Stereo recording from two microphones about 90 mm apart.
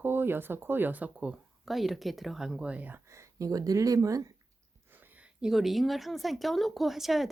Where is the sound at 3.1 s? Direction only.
35° right (ahead or behind).